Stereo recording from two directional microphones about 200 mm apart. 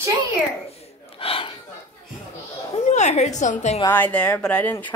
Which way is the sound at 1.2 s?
25° left (ahead or behind).